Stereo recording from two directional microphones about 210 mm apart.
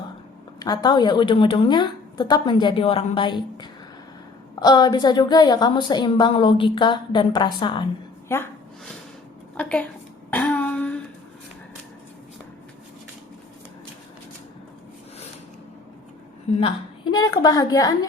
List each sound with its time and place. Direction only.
0.6 s a woman's voice: 20° left (ahead or behind)
8.3 s speech: 10° left (ahead or behind)
9.6 s a woman's voice: 5° left (ahead or behind)
10.3 s a sound: 10° left (ahead or behind)
16.6 s a woman's voice: 25° left (ahead or behind)